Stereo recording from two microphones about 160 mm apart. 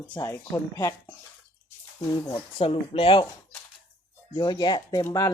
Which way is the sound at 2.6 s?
35° left (ahead or behind).